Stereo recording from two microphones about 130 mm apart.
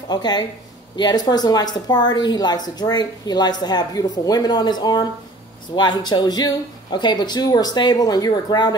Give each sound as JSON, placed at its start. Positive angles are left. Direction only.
{"t": 0.1, "sound": "a woman's voice", "side_deg": 30}